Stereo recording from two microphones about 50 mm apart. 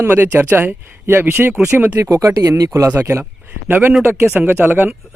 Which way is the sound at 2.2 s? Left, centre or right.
Right.